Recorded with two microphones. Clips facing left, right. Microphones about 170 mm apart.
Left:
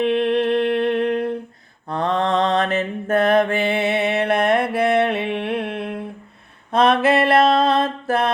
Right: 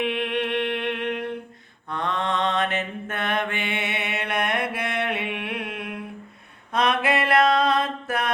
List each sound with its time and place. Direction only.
0.0 s music: 35° left (ahead or behind)
1.9 s mantra: 35° left (ahead or behind)
6.7 s a sound: 30° left (ahead or behind)